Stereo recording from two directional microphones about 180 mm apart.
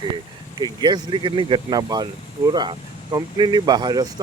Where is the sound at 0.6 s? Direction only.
25° right (ahead or behind).